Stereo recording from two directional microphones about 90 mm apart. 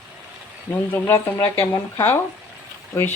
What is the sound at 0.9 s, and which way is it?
Speech, 25° left (ahead or behind).